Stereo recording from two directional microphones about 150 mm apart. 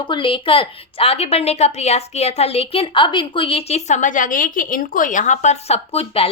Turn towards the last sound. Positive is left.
turn(degrees=40)  # may be behind; listen again after turning